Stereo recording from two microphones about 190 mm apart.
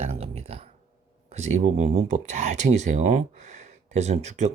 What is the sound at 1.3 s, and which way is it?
Speech, 35° right (ahead or behind).